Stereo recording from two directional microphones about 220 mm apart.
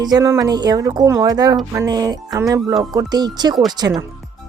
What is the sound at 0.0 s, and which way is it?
Speech, 15° right (ahead or behind).